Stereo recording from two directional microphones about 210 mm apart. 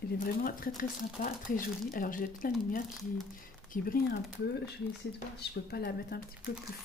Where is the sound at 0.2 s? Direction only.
40° left (ahead or behind).